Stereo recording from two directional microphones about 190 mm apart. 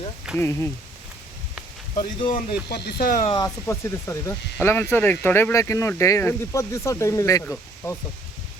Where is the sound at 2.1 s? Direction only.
25° left (ahead or behind).